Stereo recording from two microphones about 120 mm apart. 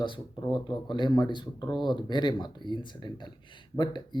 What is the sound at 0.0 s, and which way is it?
Speech, 40° left (ahead or behind).